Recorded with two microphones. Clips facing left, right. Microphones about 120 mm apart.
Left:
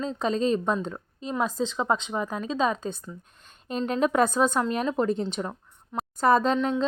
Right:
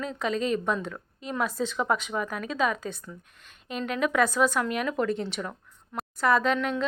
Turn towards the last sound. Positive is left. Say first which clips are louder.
# left 2 dB
turn(degrees=25)  # may be behind; listen again after turning